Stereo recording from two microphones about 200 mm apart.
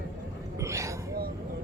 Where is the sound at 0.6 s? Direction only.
15° right (ahead or behind).